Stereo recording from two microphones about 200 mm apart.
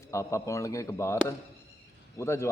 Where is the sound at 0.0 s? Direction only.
15° left (ahead or behind).